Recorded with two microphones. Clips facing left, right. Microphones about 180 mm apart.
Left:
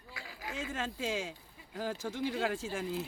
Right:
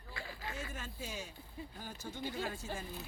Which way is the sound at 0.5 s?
90° left.